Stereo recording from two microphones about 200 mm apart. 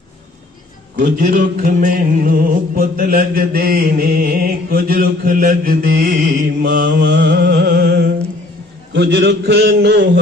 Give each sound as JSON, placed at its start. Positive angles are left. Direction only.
{"t": 0.9, "sound": "music", "side_deg": -45}
{"t": 7.1, "sound": "music", "side_deg": -60}
{"t": 8.9, "sound": "a man's voice", "side_deg": -60}